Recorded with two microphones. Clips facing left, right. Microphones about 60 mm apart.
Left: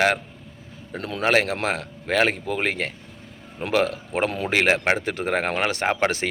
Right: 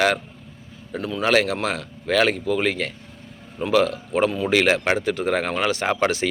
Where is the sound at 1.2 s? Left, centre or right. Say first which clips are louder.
Right 1 dB; left.